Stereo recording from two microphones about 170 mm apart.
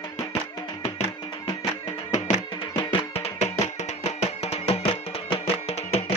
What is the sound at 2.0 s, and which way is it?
Music, 45° left (ahead or behind).